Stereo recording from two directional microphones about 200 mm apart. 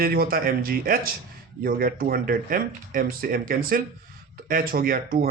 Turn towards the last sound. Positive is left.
turn(degrees=-45)  # may be behind; listen again after turning